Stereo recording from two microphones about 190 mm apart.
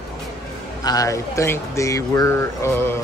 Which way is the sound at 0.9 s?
20° left (ahead or behind).